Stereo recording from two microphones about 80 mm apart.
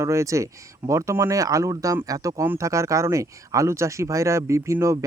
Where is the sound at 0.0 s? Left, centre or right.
Right.